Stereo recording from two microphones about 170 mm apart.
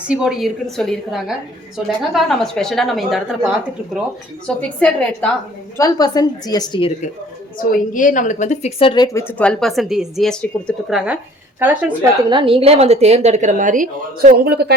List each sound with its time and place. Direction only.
0.1 s a woman's voice: 5° right (ahead or behind)
5.7 s a woman's voice: 20° left (ahead or behind)
7.6 s a woman's voice: 50° left (ahead or behind); by 9.0 s 30° left (ahead or behind)
9.1 s a woman's voice: 10° left (ahead or behind)
12.3 s speech: 30° right (ahead or behind); by 14.8 s 70° right (ahead or behind)